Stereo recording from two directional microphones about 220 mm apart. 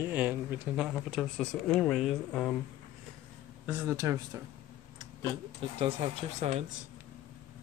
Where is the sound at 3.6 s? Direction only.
10° right (ahead or behind).